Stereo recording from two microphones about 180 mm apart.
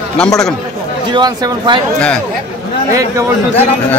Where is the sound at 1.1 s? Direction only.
25° right (ahead or behind).